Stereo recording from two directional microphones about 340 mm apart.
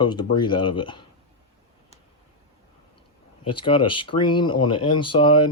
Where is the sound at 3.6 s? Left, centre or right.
Centre.